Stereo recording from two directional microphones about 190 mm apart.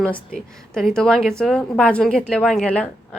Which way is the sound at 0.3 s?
Centre (ahead or behind).